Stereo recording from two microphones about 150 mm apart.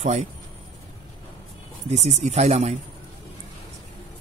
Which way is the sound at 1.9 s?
45° right (ahead or behind).